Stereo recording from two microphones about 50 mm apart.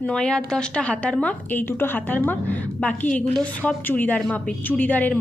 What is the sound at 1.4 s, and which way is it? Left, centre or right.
A woman's voice, left.